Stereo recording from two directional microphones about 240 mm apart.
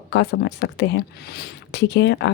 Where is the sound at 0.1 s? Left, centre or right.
Left.